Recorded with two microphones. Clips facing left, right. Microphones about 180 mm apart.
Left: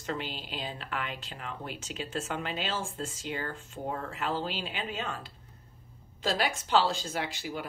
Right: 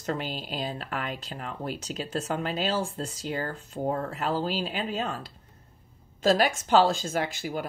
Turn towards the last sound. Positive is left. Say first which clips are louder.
# right 5 dB
turn(degrees=-45)  # may be behind; listen again after turning